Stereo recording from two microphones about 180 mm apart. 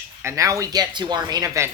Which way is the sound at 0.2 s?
15° right (ahead or behind).